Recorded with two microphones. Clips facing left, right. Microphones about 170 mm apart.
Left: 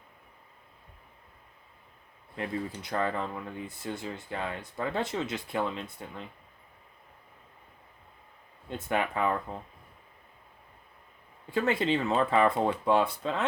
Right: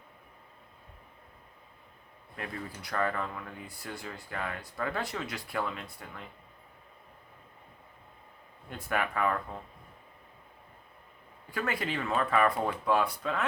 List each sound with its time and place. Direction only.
2.3 s speech: 25° left (ahead or behind)
8.7 s speech: 20° left (ahead or behind)
11.5 s speech: 25° left (ahead or behind)